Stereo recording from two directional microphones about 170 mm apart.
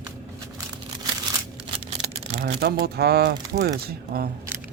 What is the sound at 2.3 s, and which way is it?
Speech, 65° right (ahead or behind).